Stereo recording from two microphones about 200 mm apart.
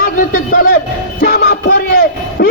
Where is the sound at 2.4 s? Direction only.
55° left (ahead or behind).